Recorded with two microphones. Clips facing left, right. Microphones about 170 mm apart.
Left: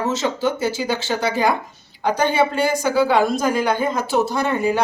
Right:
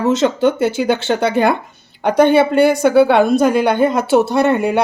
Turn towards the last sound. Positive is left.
turn(degrees=-70)  # may be behind; listen again after turning